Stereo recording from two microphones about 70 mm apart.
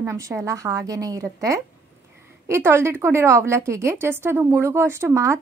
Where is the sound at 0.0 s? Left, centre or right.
Right.